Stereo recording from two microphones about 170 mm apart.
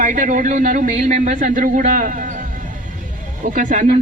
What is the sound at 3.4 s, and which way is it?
Speech, 50° right (ahead or behind).